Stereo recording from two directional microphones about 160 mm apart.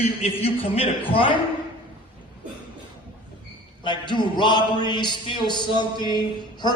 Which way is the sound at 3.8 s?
30° left (ahead or behind).